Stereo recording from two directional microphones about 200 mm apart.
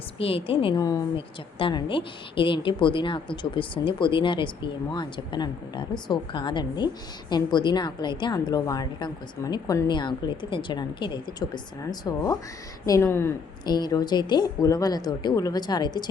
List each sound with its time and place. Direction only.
0.2 s a woman's voice: 30° left (ahead or behind)